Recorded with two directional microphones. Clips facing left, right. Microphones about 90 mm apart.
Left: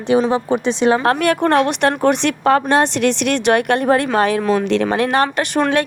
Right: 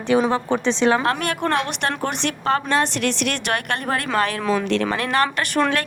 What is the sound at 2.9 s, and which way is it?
Speech, 45° right (ahead or behind).